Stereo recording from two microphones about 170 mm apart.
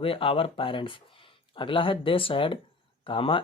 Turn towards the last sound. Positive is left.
turn(degrees=30)  # may be behind; listen again after turning